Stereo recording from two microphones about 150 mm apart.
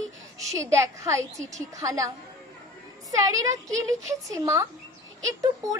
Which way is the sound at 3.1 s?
20° right (ahead or behind).